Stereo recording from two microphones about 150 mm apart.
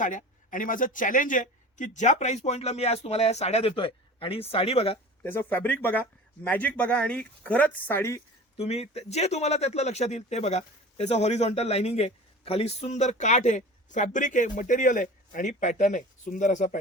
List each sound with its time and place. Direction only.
0.0 s speech: 60° left (ahead or behind); by 4.9 s 40° left (ahead or behind)
5.2 s speech: 15° left (ahead or behind)
8.5 s speech: 45° left (ahead or behind); by 16.7 s 60° left (ahead or behind)